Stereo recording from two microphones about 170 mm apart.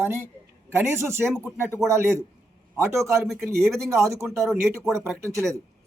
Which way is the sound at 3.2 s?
Centre (ahead or behind).